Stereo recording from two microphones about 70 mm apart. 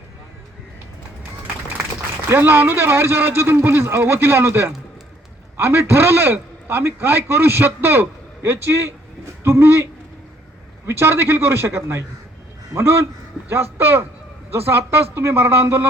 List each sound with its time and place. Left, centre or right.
2.3 s a man's voice: right